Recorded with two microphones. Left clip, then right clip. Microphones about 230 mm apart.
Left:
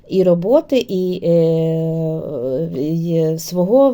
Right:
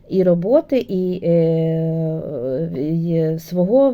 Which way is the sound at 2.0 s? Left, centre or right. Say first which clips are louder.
Left 2 dB; left.